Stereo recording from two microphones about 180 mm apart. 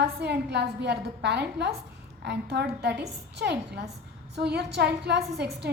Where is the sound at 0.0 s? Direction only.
65° right (ahead or behind).